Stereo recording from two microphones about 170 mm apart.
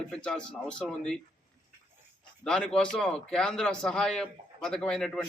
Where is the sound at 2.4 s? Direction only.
5° left (ahead or behind).